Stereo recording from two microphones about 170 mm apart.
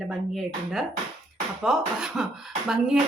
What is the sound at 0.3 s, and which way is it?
Speech, centre (ahead or behind).